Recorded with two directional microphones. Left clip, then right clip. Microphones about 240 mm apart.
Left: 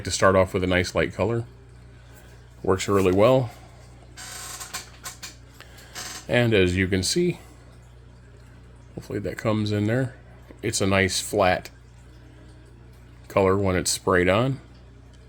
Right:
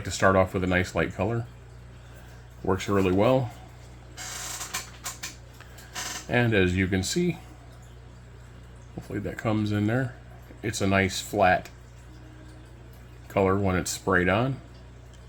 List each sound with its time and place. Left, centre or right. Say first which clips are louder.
0.0 s speech: left 3 dB; left
2.6 s speech: left 4 dB; left
6.2 s speech: left 4 dB; left
9.0 s speech: left 3 dB; left
13.2 s speech: left 3 dB; left